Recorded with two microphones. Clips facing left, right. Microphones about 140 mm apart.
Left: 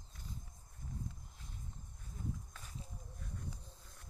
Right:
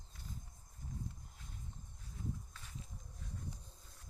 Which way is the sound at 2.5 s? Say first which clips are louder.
Left 1 dB; 40° left (ahead or behind).